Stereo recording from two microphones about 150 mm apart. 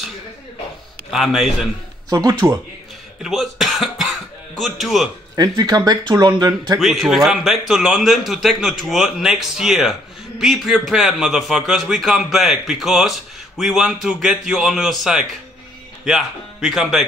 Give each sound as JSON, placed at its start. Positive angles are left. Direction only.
{"t": 1.1, "sound": "a man's voice", "side_deg": 0}
{"t": 2.0, "sound": "speech", "side_deg": -20}
{"t": 3.2, "sound": "music", "side_deg": 0}
{"t": 5.3, "sound": "speech", "side_deg": -25}
{"t": 6.8, "sound": "a man's voice", "side_deg": 0}